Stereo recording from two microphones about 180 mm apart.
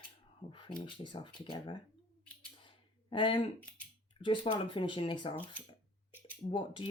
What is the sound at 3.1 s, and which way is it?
Speech, 30° left (ahead or behind).